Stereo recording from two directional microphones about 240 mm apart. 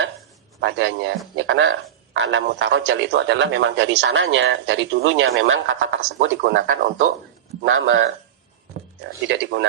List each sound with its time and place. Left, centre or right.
0.6 s speech: right
6.1 s speech: right
7.6 s speech: right